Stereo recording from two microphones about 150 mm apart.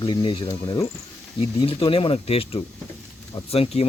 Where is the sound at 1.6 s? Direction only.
35° left (ahead or behind).